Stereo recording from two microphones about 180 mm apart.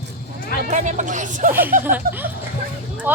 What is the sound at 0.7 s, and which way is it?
Speech, 40° right (ahead or behind).